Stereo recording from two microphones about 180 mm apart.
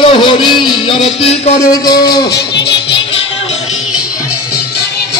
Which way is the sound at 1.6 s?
20° left (ahead or behind).